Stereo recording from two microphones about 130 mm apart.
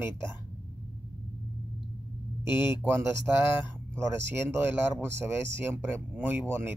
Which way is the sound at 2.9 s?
20° right (ahead or behind).